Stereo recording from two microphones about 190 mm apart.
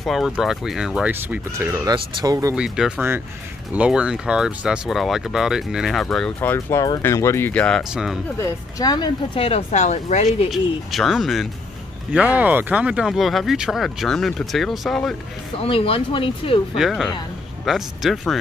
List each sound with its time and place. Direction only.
0.0 s speech: centre (ahead or behind); by 2.5 s 20° right (ahead or behind)
2.5 s speech: 5° right (ahead or behind)
8.4 s speech: 20° left (ahead or behind); by 10.5 s 35° left (ahead or behind)
10.5 s speech: centre (ahead or behind)
15.5 s speech: 30° left (ahead or behind)
16.7 s speech: centre (ahead or behind)